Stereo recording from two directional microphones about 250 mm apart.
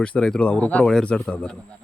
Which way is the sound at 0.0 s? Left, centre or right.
Centre.